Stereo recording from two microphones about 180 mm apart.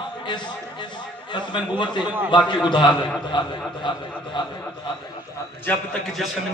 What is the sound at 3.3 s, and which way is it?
Speech, 25° left (ahead or behind).